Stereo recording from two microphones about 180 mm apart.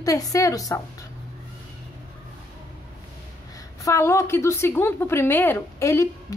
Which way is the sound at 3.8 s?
15° left (ahead or behind).